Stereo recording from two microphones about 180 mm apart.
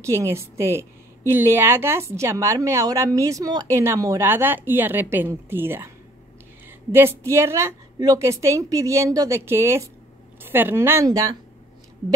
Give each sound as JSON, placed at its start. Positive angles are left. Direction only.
{"t": 0.0, "sound": "a woman's voice", "side_deg": -15}
{"t": 6.9, "sound": "a woman's voice", "side_deg": -15}